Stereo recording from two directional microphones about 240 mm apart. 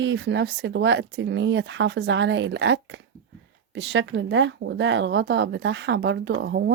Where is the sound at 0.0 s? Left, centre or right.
Right.